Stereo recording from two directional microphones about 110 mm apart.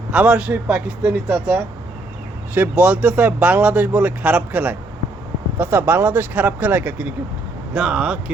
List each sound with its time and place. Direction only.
0.1 s speech: 10° right (ahead or behind)